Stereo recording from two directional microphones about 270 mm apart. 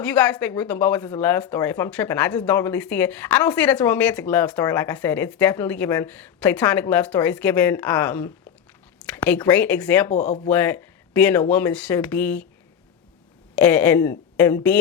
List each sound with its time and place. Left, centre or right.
0.0 s speech: centre
10.1 s speech: left
10.5 s speech: centre
13.6 s speech: centre